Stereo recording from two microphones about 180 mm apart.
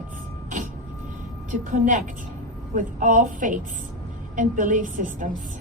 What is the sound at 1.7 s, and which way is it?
A woman's voice, 45° right (ahead or behind).